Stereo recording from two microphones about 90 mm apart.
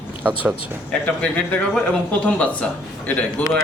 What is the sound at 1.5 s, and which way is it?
Speech, 15° left (ahead or behind).